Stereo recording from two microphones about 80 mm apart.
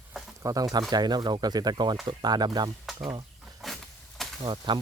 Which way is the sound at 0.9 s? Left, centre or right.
Right.